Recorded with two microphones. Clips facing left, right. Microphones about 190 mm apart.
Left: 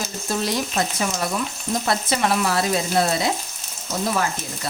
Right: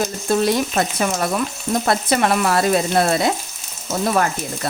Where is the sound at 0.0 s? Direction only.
55° right (ahead or behind).